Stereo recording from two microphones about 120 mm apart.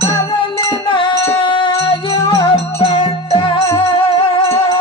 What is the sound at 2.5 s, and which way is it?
Music, 55° left (ahead or behind).